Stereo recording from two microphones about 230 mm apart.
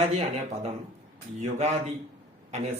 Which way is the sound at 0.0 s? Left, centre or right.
Right.